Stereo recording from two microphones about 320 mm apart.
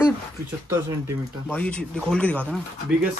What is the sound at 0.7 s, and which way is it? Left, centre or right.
Speech, centre.